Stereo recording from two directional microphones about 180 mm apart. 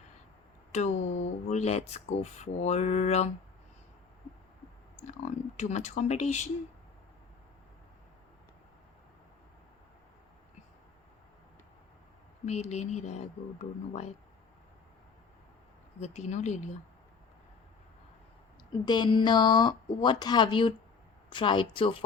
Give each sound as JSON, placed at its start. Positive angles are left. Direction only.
{"t": 0.7, "sound": "speech", "side_deg": 40}
{"t": 5.5, "sound": "speech", "side_deg": 40}
{"t": 12.5, "sound": "speech", "side_deg": 40}
{"t": 16.0, "sound": "speech", "side_deg": 40}
{"t": 18.9, "sound": "speech", "side_deg": 25}